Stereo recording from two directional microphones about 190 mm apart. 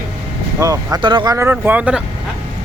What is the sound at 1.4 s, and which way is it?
Speech, 10° right (ahead or behind).